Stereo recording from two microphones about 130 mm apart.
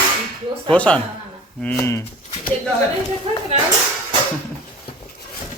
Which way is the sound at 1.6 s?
20° left (ahead or behind).